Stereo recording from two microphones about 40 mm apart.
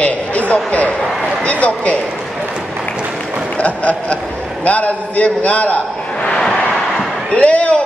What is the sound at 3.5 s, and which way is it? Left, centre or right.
A man's voice, left.